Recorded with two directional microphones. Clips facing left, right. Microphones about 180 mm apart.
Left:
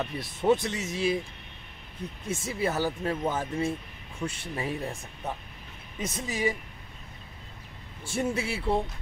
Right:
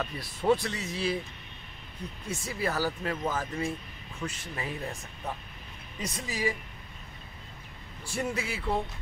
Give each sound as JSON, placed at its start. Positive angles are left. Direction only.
{"t": 0.0, "sound": "speech", "side_deg": 20}
{"t": 2.2, "sound": "speech", "side_deg": 25}
{"t": 4.6, "sound": "speech", "side_deg": 30}
{"t": 5.9, "sound": "speech", "side_deg": 25}
{"t": 8.0, "sound": "speech", "side_deg": 25}